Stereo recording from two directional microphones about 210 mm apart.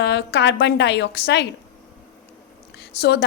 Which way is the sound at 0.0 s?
55° left (ahead or behind).